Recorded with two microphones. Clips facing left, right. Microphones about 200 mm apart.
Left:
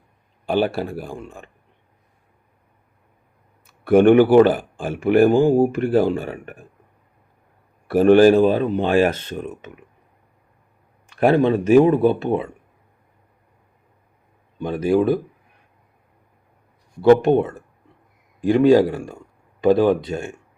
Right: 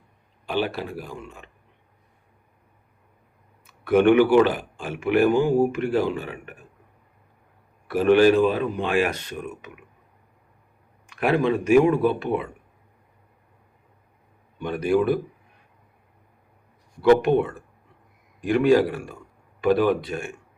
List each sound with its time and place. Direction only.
0.4 s speech: 50° left (ahead or behind)
3.9 s speech: 50° left (ahead or behind)
4.2 s speech: 35° left (ahead or behind)
4.4 s speech: 50° left (ahead or behind)
5.5 s speech: 30° left (ahead or behind)
5.8 s speech: 50° left (ahead or behind)
7.9 s speech: 40° left (ahead or behind)
11.1 s speech: 30° left (ahead or behind)
14.6 s speech: 30° left (ahead or behind)
17.0 s speech: 25° left (ahead or behind)